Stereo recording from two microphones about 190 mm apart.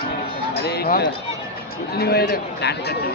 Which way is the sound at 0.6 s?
55° left (ahead or behind).